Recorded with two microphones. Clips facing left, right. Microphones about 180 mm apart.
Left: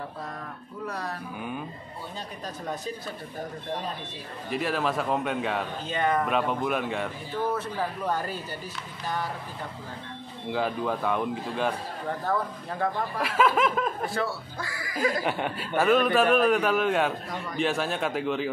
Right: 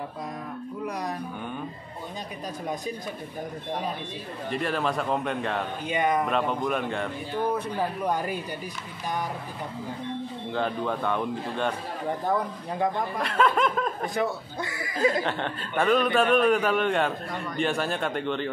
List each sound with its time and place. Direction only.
0.8 s speech: 15° right (ahead or behind)
4.5 s a man's voice: centre (ahead or behind)
5.9 s speech: 15° right (ahead or behind)
6.2 s a man's voice: centre (ahead or behind)
7.4 s speech: 15° right (ahead or behind)
10.5 s a man's voice: 5° left (ahead or behind)
12.3 s speech: 15° right (ahead or behind)
13.2 s a man's voice: 5° left (ahead or behind)
14.1 s speech: 20° right (ahead or behind)
15.2 s a man's voice: 10° left (ahead or behind)